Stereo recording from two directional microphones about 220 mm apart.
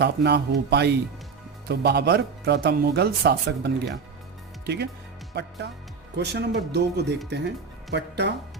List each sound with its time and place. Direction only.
0.0 s speech: 50° right (ahead or behind)